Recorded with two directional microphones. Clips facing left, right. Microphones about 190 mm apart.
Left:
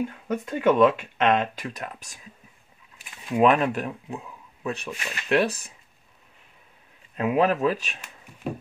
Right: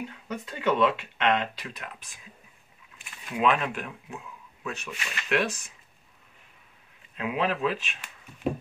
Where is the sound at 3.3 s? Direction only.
40° left (ahead or behind).